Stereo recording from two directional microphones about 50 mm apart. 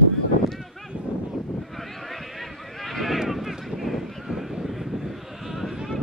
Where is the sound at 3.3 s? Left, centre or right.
Centre.